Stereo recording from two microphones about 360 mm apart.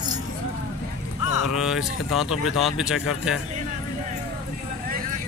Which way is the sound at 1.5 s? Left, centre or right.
Centre.